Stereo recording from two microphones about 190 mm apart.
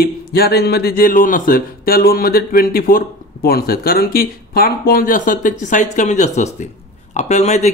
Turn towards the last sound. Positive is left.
turn(degrees=35)  # may be behind; listen again after turning